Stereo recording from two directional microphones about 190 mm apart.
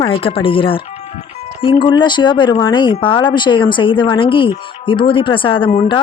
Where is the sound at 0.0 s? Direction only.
30° left (ahead or behind).